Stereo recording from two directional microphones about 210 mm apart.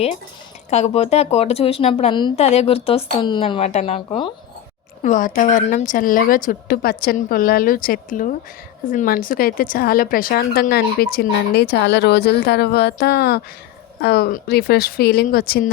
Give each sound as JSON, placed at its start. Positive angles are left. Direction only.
{"t": 0.7, "sound": "a woman's voice", "side_deg": 30}